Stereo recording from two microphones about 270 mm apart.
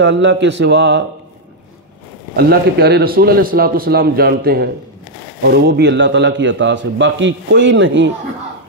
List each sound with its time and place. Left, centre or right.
0.0 s speech: right
2.3 s a man's voice: right